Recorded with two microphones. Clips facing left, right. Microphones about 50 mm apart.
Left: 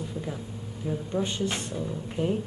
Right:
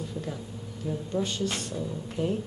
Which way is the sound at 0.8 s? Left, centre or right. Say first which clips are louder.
Left 1 dB; left.